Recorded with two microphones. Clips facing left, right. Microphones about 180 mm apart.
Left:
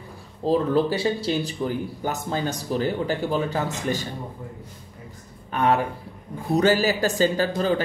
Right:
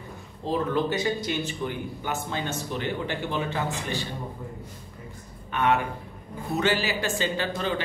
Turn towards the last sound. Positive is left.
turn(degrees=40)  # may be behind; listen again after turning